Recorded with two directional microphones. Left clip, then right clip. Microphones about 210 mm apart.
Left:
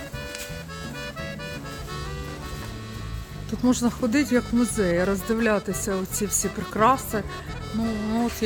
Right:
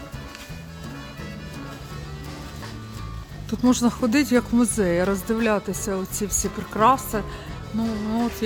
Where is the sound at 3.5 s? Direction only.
20° right (ahead or behind).